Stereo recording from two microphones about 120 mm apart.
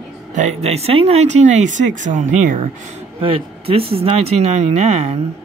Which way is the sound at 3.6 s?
55° right (ahead or behind).